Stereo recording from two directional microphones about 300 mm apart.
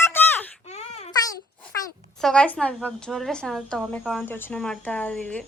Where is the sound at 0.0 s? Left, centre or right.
Centre.